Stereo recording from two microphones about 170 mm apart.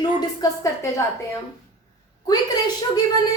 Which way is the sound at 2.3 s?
20° left (ahead or behind).